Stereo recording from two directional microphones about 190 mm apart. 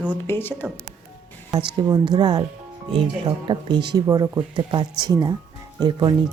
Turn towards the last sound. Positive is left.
turn(degrees=-20)  # may be behind; listen again after turning